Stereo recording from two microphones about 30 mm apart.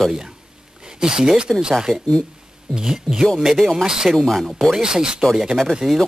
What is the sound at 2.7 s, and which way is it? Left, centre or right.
Speech, right.